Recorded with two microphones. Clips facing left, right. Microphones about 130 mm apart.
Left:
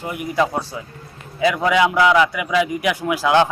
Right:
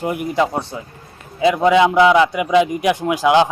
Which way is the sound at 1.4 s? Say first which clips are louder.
Right 4 dB; 25° right (ahead or behind).